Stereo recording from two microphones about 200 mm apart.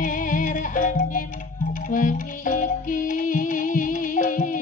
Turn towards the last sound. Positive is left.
turn(degrees=40)  # may be behind; listen again after turning